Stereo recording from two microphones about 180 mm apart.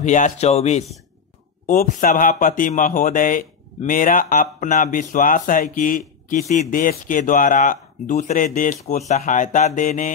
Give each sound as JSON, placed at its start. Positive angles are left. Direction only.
{"t": 0.0, "sound": "speech", "side_deg": 40}
{"t": 2.0, "sound": "speech", "side_deg": 50}